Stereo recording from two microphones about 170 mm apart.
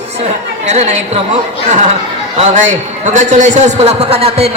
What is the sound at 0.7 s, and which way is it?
Speech, 40° right (ahead or behind).